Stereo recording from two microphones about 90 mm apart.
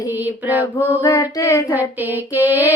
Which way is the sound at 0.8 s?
25° left (ahead or behind).